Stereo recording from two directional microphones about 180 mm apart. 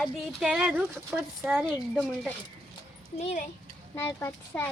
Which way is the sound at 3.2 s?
40° left (ahead or behind).